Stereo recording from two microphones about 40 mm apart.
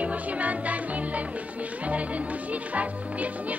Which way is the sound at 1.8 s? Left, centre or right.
Right.